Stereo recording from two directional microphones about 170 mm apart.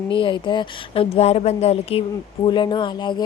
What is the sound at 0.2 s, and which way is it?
A woman's voice, 30° left (ahead or behind).